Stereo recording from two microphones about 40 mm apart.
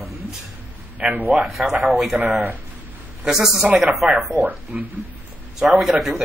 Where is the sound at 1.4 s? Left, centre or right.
Centre.